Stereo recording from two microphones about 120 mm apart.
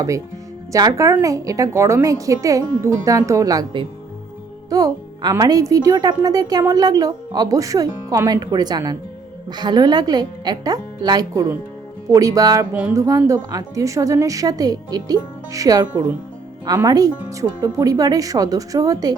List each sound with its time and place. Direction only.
0.7 s a woman's voice: 30° right (ahead or behind)